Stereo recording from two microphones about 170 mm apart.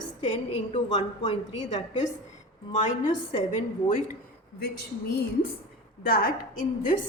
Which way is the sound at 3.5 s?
45° left (ahead or behind).